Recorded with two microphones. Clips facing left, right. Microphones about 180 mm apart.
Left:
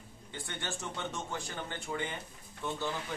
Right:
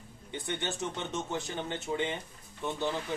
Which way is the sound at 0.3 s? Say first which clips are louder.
Right 6 dB; 20° right (ahead or behind).